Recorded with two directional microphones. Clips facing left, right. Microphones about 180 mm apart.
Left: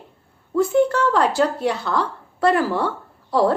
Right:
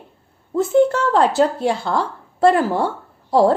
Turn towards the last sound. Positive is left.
turn(degrees=-25)  # may be behind; listen again after turning